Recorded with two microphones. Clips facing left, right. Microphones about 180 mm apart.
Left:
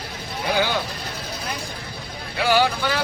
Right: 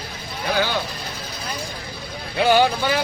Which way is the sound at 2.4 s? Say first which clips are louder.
Right 3 dB; 20° right (ahead or behind).